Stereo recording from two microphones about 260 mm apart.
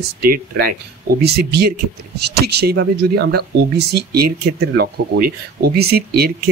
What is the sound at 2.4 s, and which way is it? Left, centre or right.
Speech, right.